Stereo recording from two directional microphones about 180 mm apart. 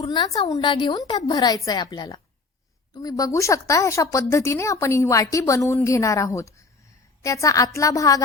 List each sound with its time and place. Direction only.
0.0 s a woman's voice: 25° left (ahead or behind)